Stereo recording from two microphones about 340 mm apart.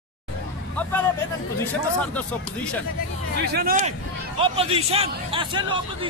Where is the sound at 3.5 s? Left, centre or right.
Right.